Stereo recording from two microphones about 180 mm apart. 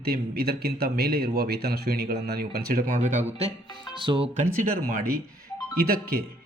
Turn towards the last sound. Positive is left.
turn(degrees=-55)  # may be behind; listen again after turning